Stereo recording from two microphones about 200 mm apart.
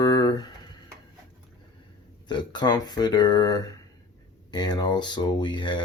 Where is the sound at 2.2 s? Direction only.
20° left (ahead or behind).